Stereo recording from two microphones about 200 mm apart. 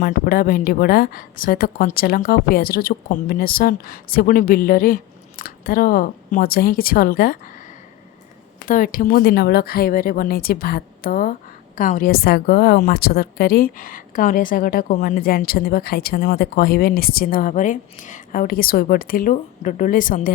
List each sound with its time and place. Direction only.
0.0 s a woman's voice: 45° left (ahead or behind)
8.6 s a woman's voice: 40° left (ahead or behind)